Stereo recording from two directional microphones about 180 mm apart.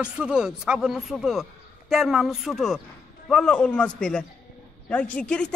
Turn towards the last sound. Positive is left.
turn(degrees=5)  # may be behind; listen again after turning